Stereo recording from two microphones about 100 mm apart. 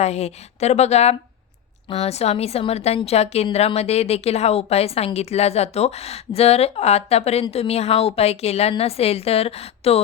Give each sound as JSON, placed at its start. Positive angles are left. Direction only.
{"t": 0.0, "sound": "a woman's voice", "side_deg": 90}